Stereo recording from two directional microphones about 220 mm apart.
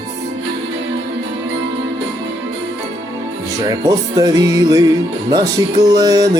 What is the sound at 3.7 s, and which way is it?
Music, 15° right (ahead or behind).